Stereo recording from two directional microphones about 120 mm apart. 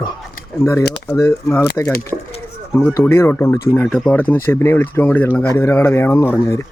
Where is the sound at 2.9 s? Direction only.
20° left (ahead or behind).